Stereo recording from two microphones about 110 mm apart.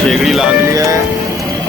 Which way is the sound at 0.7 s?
30° right (ahead or behind).